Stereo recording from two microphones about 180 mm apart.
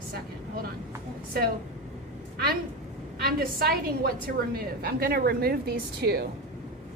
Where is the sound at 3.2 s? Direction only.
55° right (ahead or behind).